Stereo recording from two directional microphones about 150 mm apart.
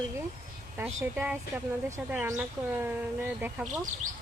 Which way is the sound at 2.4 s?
15° right (ahead or behind).